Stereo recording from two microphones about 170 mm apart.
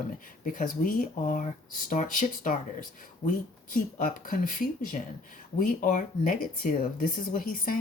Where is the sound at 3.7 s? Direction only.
50° left (ahead or behind).